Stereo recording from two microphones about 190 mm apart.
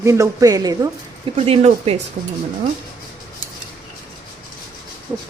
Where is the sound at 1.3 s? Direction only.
30° right (ahead or behind).